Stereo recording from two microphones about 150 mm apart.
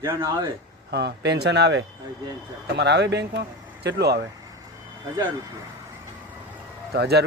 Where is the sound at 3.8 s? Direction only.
90° right.